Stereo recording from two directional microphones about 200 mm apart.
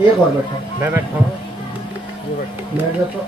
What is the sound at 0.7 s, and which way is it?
Speech, 10° right (ahead or behind).